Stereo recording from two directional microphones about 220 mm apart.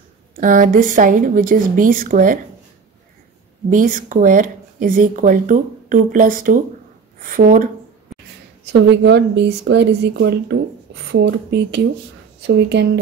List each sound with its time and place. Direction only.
0.4 s speech: 35° right (ahead or behind)
3.7 s speech: 35° right (ahead or behind)
8.1 s a sound: centre (ahead or behind)
8.8 s speech: 50° right (ahead or behind)